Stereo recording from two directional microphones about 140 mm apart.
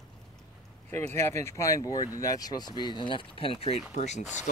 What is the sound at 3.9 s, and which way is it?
Speech, 55° left (ahead or behind).